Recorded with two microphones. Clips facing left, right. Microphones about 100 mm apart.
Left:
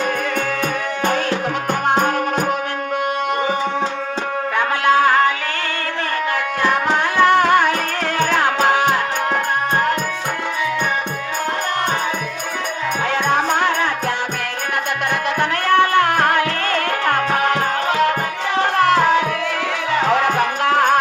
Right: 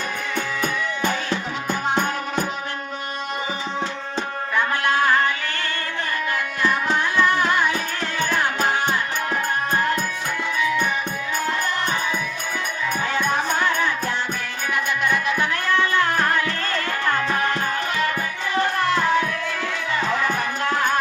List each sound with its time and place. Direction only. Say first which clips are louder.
0.6 s music: left 3 dB; 60° left (ahead or behind)
4.5 s music: left 5 dB; 90° left
6.6 s music: left 4 dB; 70° left (ahead or behind)
8.2 s music: left 5 dB; 85° left; by 9.9 s 65° left (ahead or behind)
13.1 s music: left 5 dB; 70° left (ahead or behind)
15.1 s music: left 3 dB; 65° left (ahead or behind)